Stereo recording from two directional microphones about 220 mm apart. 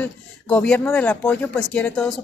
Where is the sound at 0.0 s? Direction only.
10° left (ahead or behind).